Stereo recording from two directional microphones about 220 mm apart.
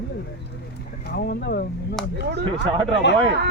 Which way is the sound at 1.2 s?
45° left (ahead or behind).